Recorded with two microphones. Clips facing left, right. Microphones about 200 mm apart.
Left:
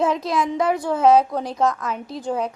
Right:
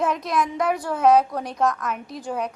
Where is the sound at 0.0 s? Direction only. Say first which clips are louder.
Left 2 dB; 25° left (ahead or behind).